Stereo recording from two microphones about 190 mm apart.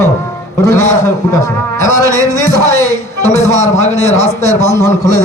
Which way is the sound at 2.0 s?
15° right (ahead or behind).